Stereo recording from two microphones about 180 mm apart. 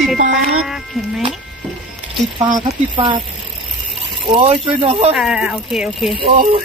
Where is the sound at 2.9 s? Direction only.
25° right (ahead or behind).